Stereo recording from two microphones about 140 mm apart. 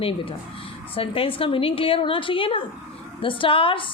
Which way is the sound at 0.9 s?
40° left (ahead or behind).